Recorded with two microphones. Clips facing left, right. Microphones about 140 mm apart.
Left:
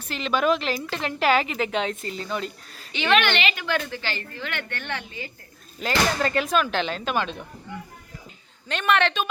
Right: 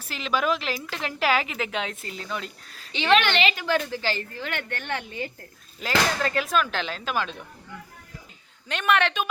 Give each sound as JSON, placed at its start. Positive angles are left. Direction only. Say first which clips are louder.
{"t": 0.0, "sound": "a woman's voice", "louder": "left 3 dB", "side_deg": -5}
{"t": 2.9, "sound": "a woman's voice", "louder": "right 1 dB", "side_deg": -30}
{"t": 5.8, "sound": "a woman's voice", "louder": "left 1 dB", "side_deg": 0}
{"t": 8.7, "sound": "a man's voice", "louder": "left 1 dB", "side_deg": -10}